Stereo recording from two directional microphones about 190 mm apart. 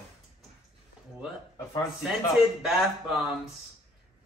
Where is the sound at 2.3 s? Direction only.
Centre (ahead or behind).